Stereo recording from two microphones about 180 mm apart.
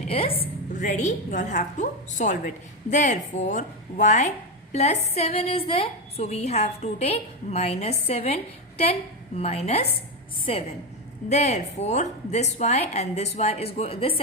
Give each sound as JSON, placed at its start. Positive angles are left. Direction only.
{"t": 0.1, "sound": "a woman's voice", "side_deg": 30}
{"t": 0.7, "sound": "a woman's voice", "side_deg": 45}
{"t": 11.3, "sound": "a woman's voice", "side_deg": 40}